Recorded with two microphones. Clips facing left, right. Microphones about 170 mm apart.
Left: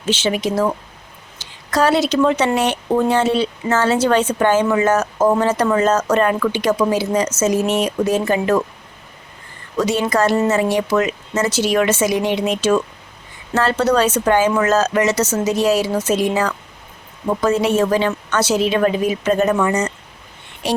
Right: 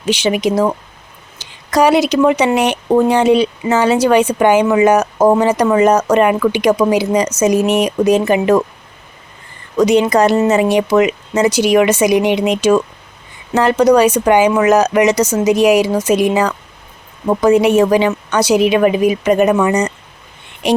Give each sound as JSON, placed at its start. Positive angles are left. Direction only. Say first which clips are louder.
{"t": 0.0, "sound": "speech", "louder": "right 4 dB", "side_deg": -15}
{"t": 9.7, "sound": "speech", "louder": "right 6 dB", "side_deg": -20}